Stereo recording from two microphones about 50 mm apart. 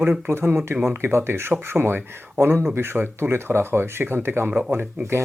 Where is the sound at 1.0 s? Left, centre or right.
Right.